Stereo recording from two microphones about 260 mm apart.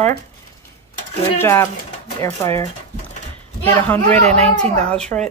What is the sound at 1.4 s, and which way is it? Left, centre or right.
A man's voice, centre.